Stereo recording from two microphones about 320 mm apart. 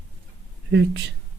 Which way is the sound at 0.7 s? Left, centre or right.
Right.